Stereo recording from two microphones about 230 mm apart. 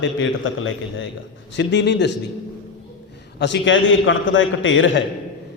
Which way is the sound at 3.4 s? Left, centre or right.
Left.